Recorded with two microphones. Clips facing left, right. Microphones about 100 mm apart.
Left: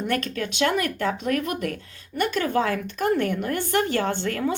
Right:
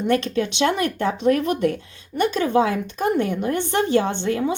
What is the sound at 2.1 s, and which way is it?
Speech, 20° right (ahead or behind).